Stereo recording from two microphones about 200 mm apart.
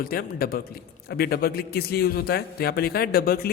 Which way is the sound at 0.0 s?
50° left (ahead or behind).